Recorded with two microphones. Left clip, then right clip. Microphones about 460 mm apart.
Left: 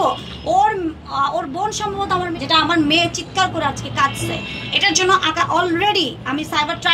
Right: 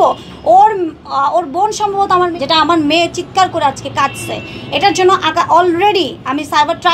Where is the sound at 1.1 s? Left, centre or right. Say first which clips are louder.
Right 7 dB; right.